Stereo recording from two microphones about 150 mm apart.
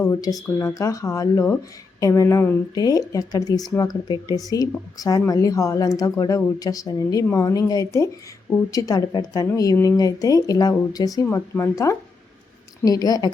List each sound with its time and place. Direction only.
0.0 s speech: 20° left (ahead or behind)